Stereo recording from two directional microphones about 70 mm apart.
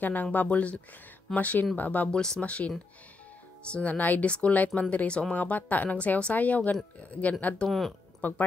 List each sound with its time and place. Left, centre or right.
0.0 s speech: left
2.1 s speech: centre
3.7 s speech: left
7.6 s speech: centre
8.2 s speech: left